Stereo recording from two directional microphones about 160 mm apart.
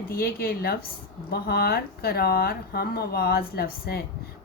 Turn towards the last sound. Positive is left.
turn(degrees=75)  # may be behind; listen again after turning